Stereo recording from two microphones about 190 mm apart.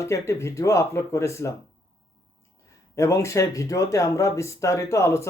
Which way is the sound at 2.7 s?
15° left (ahead or behind).